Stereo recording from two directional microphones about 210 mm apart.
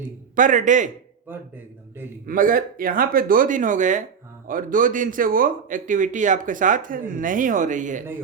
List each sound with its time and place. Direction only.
0.3 s speech: 40° right (ahead or behind)
1.3 s speech: 10° right (ahead or behind)
2.2 s speech: 40° right (ahead or behind)